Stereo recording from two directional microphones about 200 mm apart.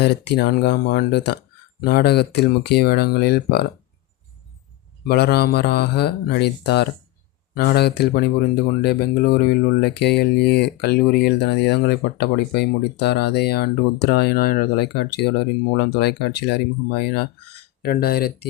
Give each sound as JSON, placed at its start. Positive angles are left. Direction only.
{"t": 0.0, "sound": "speech", "side_deg": 55}
{"t": 5.0, "sound": "speech", "side_deg": 55}